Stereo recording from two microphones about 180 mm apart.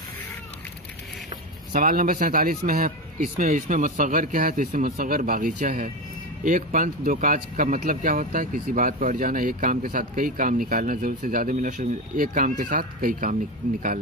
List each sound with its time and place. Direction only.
1.7 s speech: 50° right (ahead or behind)